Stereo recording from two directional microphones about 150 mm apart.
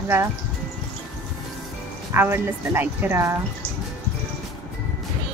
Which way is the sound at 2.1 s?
15° right (ahead or behind).